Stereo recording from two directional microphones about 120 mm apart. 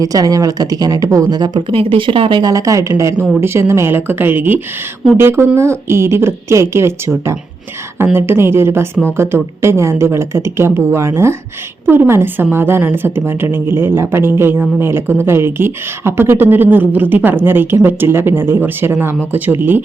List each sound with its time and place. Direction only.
0.0 s speech: 30° right (ahead or behind); by 2.4 s 45° right (ahead or behind)
2.4 s a woman's voice: 30° right (ahead or behind)